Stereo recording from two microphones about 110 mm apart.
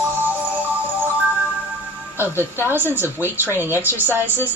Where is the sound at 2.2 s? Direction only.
20° right (ahead or behind).